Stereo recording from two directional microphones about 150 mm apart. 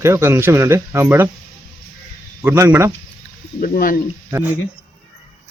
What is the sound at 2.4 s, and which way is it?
Speech, 15° right (ahead or behind).